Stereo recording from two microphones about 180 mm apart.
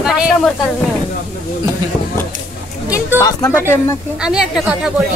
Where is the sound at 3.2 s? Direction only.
15° left (ahead or behind).